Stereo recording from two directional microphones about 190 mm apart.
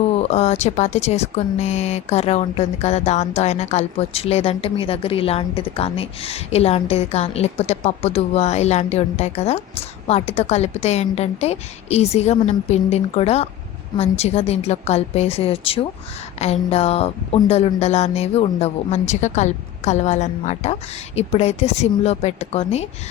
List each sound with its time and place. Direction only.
0.2 s speech: 35° left (ahead or behind)